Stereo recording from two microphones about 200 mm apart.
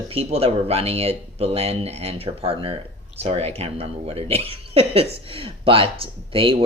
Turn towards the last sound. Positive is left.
turn(degrees=-25)  # may be behind; listen again after turning